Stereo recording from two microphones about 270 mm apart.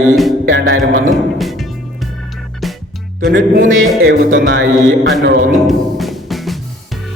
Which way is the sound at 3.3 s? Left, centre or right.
Right.